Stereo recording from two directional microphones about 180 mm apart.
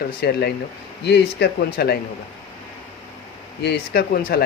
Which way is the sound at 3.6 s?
60° left (ahead or behind).